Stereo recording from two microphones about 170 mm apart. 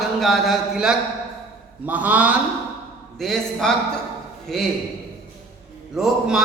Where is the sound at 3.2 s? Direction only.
Centre (ahead or behind).